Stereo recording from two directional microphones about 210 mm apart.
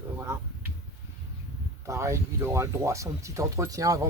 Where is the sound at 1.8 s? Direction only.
15° right (ahead or behind).